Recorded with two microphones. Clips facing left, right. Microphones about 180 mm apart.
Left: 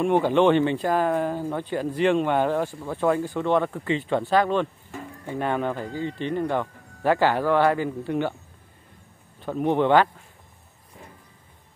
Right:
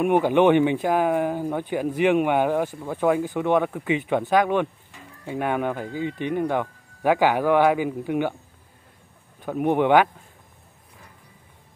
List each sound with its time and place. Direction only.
0.0 s speech: 15° right (ahead or behind)
9.4 s speech: 10° right (ahead or behind)